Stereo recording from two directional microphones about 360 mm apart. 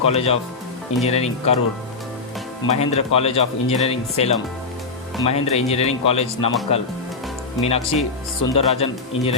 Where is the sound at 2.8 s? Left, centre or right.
Centre.